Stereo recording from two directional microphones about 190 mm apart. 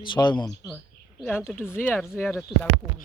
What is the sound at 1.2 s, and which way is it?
Speech, 5° left (ahead or behind).